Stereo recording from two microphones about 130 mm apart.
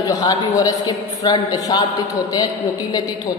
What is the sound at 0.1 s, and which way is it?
A man's voice, 30° left (ahead or behind).